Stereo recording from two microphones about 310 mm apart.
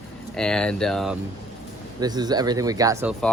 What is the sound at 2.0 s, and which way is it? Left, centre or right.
Speech, centre.